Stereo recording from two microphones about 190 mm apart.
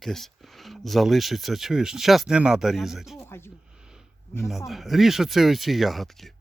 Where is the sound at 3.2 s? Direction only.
10° left (ahead or behind).